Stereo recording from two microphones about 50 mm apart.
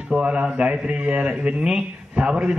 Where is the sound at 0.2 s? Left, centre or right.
Right.